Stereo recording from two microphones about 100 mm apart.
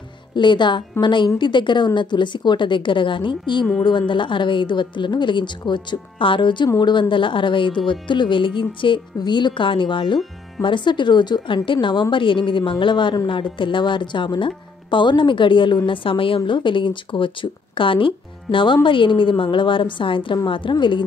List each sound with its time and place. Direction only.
0.4 s a woman's voice: 50° left (ahead or behind)